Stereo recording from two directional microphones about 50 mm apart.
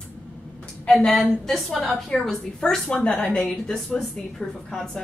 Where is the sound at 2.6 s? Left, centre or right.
Centre.